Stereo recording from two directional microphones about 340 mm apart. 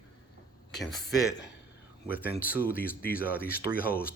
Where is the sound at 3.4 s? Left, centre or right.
Left.